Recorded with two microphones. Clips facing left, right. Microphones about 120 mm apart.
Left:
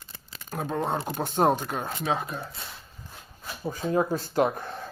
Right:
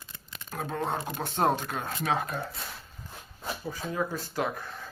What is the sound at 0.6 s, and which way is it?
Speech, 15° left (ahead or behind).